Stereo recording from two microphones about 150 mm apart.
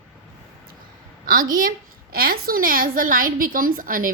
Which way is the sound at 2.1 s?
85° right.